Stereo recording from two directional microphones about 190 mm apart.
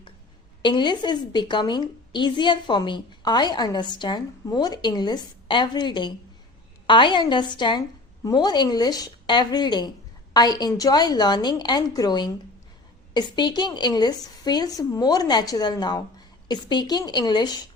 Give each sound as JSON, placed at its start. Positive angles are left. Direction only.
{"t": 0.6, "sound": "a woman's voice", "side_deg": 25}